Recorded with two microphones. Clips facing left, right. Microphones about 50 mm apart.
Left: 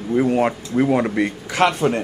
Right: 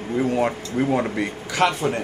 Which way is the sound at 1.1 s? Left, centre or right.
Left.